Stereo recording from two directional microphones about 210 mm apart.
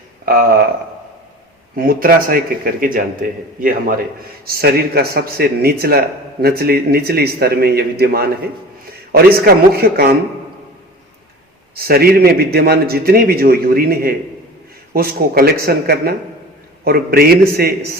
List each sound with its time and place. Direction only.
0.3 s a man's voice: 45° right (ahead or behind)
1.7 s a man's voice: 45° right (ahead or behind)
11.7 s a man's voice: 45° right (ahead or behind)